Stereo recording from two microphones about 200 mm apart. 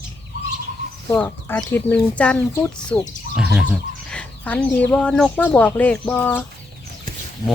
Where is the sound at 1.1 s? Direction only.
10° left (ahead or behind).